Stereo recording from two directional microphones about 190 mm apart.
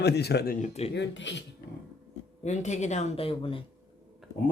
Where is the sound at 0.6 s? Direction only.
35° left (ahead or behind).